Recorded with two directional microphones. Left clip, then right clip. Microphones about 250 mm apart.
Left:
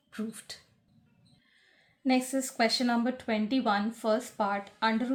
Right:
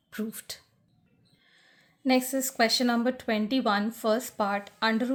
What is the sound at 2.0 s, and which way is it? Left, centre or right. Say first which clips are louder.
Speech: right 3 dB; right.